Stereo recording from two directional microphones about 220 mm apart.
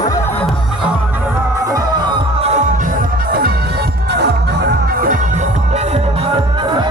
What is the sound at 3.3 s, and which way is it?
Music, 45° right (ahead or behind).